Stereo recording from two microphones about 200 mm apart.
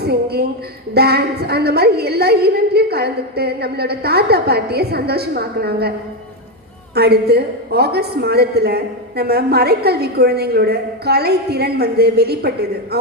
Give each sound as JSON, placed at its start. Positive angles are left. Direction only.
{"t": 0.0, "sound": "a sound", "side_deg": -50}
{"t": 0.9, "sound": "a woman's voice", "side_deg": -55}
{"t": 6.9, "sound": "a woman's voice", "side_deg": -55}